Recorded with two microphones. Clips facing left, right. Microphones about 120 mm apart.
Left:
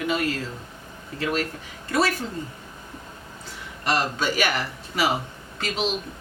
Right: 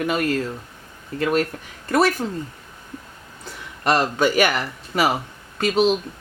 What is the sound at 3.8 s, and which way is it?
Speech, 55° right (ahead or behind).